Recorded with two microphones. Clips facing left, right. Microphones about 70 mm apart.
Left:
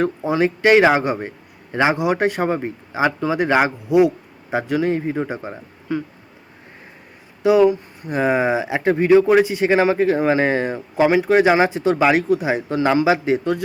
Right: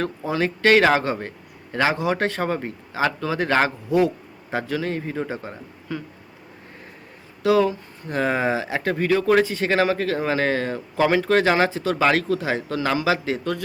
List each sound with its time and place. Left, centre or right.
0.0 s speech: left
7.4 s speech: centre